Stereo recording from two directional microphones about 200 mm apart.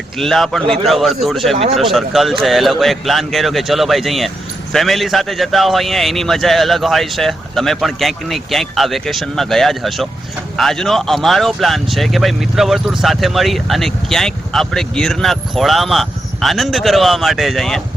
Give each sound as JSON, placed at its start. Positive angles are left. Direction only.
{"t": 0.2, "sound": "speech", "side_deg": 0}
{"t": 1.5, "sound": "speech", "side_deg": -30}
{"t": 1.8, "sound": "speech", "side_deg": 0}